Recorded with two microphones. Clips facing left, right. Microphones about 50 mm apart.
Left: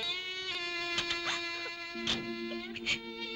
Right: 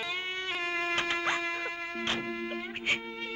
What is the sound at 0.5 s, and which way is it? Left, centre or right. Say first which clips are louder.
Music: right 6 dB; right.